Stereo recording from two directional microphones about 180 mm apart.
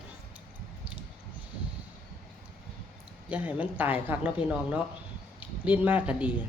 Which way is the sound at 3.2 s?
10° right (ahead or behind).